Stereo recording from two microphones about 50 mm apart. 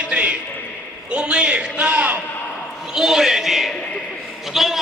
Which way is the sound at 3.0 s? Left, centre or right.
Centre.